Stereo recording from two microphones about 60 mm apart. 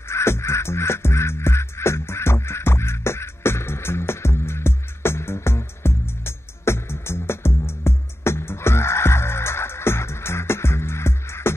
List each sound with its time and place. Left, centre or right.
0.1 s music: left